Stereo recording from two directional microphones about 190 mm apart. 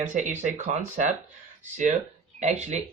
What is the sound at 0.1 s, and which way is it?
Speech, 40° right (ahead or behind).